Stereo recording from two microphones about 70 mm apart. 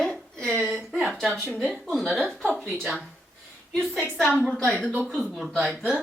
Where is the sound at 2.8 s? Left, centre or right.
Centre.